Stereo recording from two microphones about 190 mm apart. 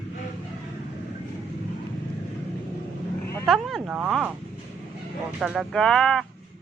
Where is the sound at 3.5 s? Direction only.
Centre (ahead or behind).